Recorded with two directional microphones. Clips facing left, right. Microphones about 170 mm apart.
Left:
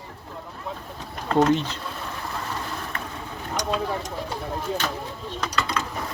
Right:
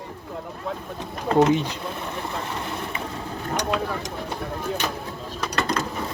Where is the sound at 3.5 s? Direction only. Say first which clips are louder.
Even; 60° right (ahead or behind).